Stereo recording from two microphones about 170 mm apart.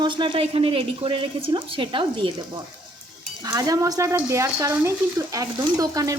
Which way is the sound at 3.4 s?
20° right (ahead or behind).